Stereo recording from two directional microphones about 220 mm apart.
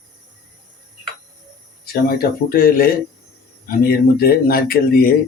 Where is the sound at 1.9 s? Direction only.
45° left (ahead or behind).